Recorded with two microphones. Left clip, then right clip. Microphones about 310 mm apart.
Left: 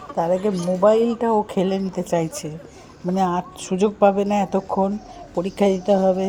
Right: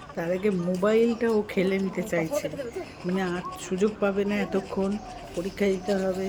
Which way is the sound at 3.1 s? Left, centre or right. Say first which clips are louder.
Left 9 dB; centre.